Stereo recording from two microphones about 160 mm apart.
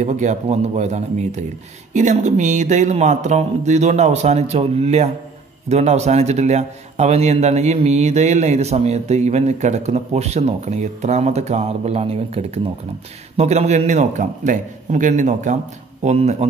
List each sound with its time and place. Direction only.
0.0 s speech: 50° right (ahead or behind)